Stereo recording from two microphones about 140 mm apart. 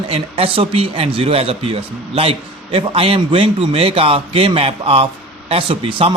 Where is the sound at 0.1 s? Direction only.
45° right (ahead or behind).